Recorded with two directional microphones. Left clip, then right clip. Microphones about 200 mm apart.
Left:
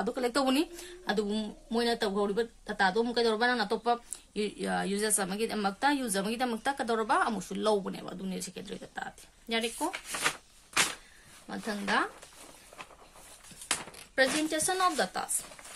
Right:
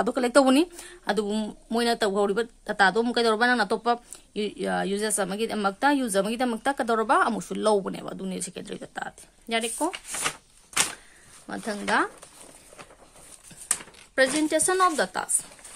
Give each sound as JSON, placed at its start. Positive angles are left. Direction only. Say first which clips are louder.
{"t": 0.0, "sound": "speech", "louder": "right 9 dB", "side_deg": -45}
{"t": 11.4, "sound": "speech", "louder": "right 5 dB", "side_deg": -50}
{"t": 14.1, "sound": "speech", "louder": "right 5 dB", "side_deg": -50}